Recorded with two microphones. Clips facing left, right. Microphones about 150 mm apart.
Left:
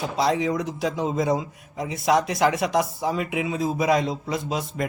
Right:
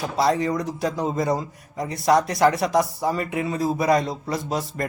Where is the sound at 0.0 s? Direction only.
Centre (ahead or behind).